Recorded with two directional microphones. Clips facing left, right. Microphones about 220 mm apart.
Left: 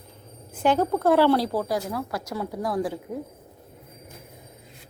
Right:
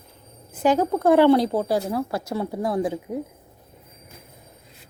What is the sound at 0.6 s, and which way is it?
Speech, 10° right (ahead or behind).